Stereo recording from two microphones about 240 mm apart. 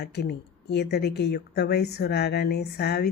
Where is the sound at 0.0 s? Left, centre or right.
Left.